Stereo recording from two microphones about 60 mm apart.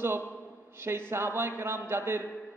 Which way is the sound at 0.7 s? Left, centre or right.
Right.